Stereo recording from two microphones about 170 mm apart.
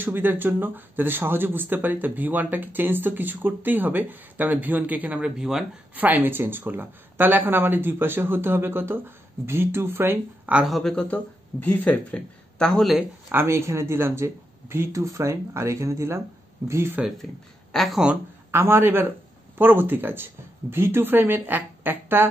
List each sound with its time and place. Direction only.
0.0 s speech: 10° right (ahead or behind)
13.3 s speech: 15° right (ahead or behind)
17.7 s speech: centre (ahead or behind)
18.5 s speech: 15° right (ahead or behind)